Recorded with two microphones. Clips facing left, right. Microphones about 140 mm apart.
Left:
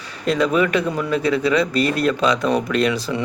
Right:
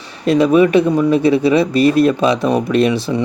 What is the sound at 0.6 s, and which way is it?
Speech, 30° right (ahead or behind).